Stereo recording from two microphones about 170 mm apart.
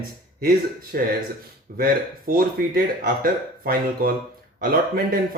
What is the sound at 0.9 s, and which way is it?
A man's voice, 65° right (ahead or behind).